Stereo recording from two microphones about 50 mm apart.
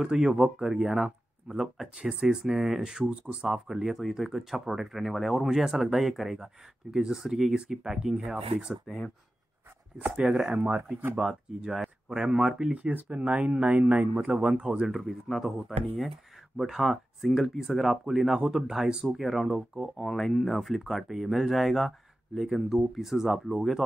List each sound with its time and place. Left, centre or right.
0.0 s speech: centre
3.4 s speech: centre
10.0 s speech: centre
10.5 s speech: right
11.1 s speech: centre
12.1 s speech: centre
12.9 s speech: right; by 14.9 s centre
14.9 s speech: centre
20.0 s speech: centre